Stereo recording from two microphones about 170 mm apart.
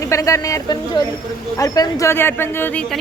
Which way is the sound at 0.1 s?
20° left (ahead or behind).